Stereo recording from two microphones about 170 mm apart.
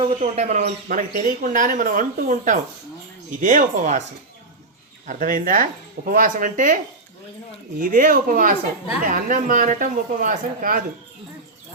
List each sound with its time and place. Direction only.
0.2 s speech: 45° right (ahead or behind)
0.6 s speech: 55° right (ahead or behind)
5.0 s speech: 50° right (ahead or behind)
7.8 s speech: 55° right (ahead or behind)